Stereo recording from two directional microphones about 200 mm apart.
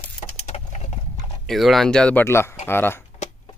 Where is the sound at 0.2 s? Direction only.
35° left (ahead or behind).